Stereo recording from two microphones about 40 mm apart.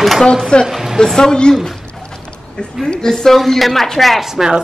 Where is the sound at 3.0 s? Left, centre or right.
Centre.